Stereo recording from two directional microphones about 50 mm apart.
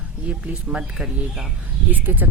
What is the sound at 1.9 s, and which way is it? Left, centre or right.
Speech, right.